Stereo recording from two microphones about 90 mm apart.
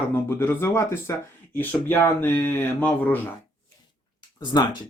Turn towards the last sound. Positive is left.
turn(degrees=50)  # may be behind; listen again after turning